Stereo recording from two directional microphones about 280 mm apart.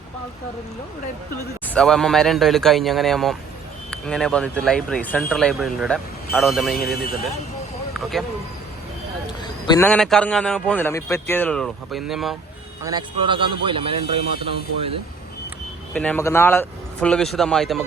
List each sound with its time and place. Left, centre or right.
1.6 s a man's voice: centre
6.7 s speech: left
9.4 s a man's voice: centre
12.8 s a man's voice: centre
16.0 s a man's voice: centre